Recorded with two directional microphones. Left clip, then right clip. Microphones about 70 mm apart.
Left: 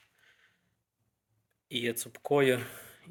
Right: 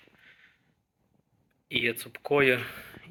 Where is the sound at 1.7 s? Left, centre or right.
Left.